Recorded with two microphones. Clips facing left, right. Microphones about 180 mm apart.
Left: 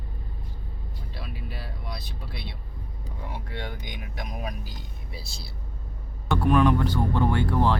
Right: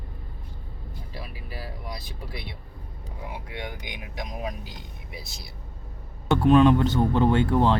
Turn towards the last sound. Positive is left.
turn(degrees=-20)  # may be behind; listen again after turning